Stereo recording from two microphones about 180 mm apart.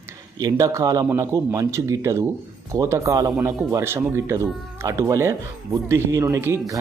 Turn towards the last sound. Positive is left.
turn(degrees=-15)  # may be behind; listen again after turning